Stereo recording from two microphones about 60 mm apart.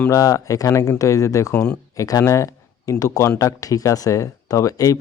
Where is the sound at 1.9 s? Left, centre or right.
Left.